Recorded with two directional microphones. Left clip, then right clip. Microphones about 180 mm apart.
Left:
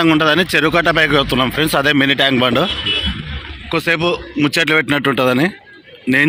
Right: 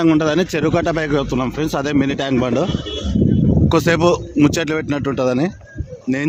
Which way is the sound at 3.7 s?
30° right (ahead or behind).